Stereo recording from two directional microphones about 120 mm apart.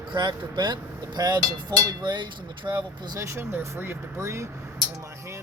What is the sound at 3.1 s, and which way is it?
Speech, 25° right (ahead or behind).